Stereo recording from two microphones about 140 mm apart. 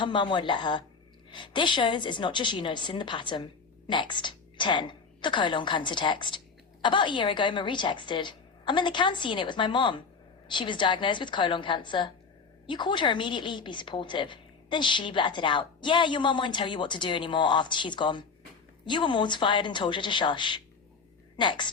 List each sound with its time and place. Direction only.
0.0 s a woman's voice: 35° left (ahead or behind)